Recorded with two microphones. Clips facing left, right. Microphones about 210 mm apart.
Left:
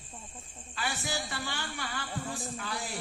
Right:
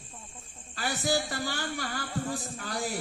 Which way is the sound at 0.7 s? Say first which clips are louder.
Right 6 dB; 40° right (ahead or behind).